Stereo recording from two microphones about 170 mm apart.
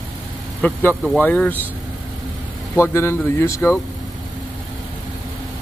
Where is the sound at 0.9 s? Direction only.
5° right (ahead or behind).